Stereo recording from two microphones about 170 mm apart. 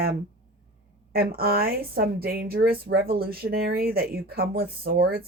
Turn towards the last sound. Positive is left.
turn(degrees=-65)  # may be behind; listen again after turning